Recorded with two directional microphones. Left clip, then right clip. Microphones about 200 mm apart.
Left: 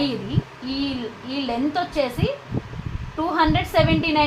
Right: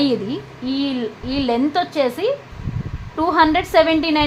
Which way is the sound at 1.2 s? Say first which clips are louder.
Right 5 dB; 55° right (ahead or behind).